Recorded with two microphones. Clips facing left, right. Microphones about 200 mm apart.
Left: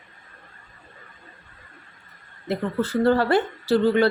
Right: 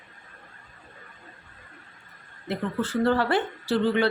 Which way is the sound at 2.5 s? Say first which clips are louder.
Left 3 dB; 40° left (ahead or behind).